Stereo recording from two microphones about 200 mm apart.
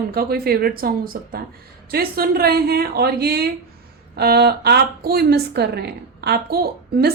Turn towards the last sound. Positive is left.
turn(degrees=-50)  # may be behind; listen again after turning